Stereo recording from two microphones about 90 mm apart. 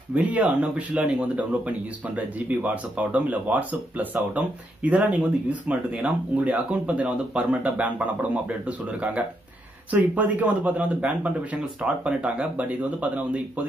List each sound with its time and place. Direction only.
0.1 s speech: 15° right (ahead or behind)